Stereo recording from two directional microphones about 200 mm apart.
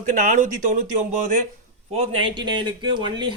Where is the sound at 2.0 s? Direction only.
25° right (ahead or behind).